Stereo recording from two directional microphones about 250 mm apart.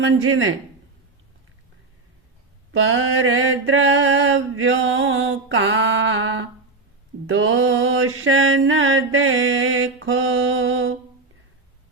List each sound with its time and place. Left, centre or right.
0.0 s speech: right
2.7 s mantra: right